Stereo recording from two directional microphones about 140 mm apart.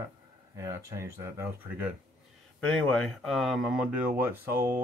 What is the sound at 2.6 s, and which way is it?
Speech, 5° left (ahead or behind).